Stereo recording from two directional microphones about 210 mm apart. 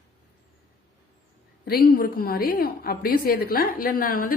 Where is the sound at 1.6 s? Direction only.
45° left (ahead or behind).